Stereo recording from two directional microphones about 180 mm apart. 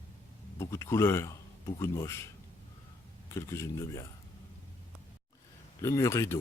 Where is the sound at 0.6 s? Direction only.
15° left (ahead or behind).